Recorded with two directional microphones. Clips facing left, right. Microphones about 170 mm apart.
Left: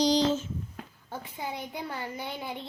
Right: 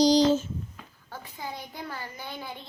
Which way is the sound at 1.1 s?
25° left (ahead or behind).